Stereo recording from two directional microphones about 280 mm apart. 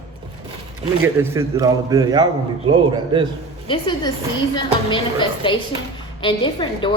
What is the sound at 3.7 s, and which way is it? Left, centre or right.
Speech, centre.